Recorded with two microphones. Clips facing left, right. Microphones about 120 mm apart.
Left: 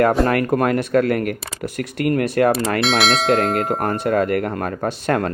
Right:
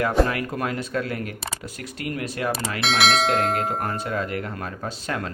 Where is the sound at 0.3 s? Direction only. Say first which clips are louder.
Left 9 dB; 55° left (ahead or behind).